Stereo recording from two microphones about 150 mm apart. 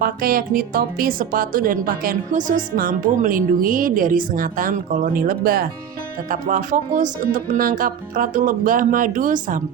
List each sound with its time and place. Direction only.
0.0 s speech: 75° right (ahead or behind)
6.3 s speech: 65° right (ahead or behind)